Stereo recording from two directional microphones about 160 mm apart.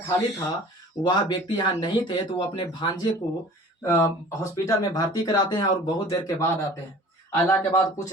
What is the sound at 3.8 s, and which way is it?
Speech, 15° left (ahead or behind).